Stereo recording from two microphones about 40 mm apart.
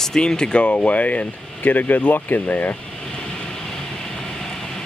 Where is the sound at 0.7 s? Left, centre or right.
Left.